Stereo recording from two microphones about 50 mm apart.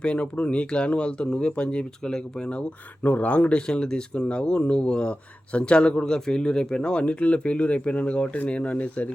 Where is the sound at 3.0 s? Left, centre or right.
Left.